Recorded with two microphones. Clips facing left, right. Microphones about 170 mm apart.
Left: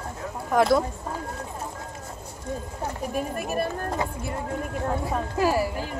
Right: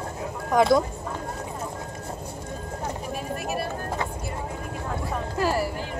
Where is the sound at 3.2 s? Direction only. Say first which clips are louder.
Left 4 dB; 50° left (ahead or behind).